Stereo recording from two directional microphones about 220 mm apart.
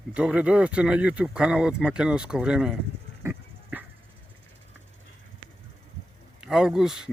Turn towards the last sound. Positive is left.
turn(degrees=0)  # may be behind; listen again after turning